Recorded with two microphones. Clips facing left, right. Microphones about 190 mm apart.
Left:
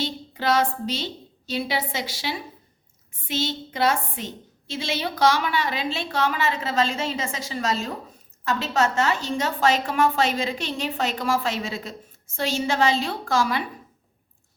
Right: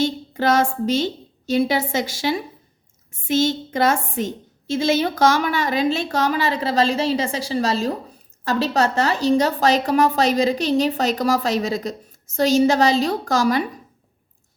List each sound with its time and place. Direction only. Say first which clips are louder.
0.0 s a woman's voice: right 7 dB; 45° right (ahead or behind)